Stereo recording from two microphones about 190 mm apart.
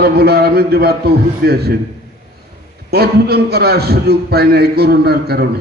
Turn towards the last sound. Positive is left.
turn(degrees=-55)  # may be behind; listen again after turning